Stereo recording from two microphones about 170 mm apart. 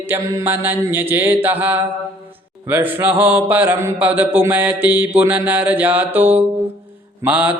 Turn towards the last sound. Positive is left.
turn(degrees=-10)  # may be behind; listen again after turning